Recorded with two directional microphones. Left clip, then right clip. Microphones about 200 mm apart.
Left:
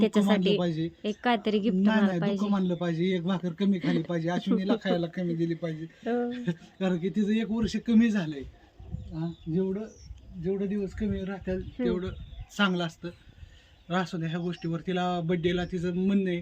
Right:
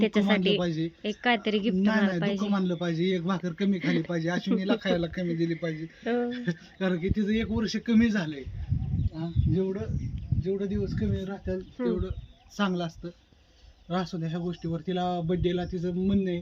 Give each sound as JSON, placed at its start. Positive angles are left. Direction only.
{"t": 0.0, "sound": "a man's voice", "side_deg": 10}
{"t": 13.8, "sound": "a man's voice", "side_deg": -15}